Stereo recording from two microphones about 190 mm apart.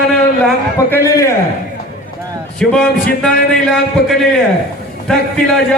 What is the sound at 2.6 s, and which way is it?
Speech, 5° left (ahead or behind).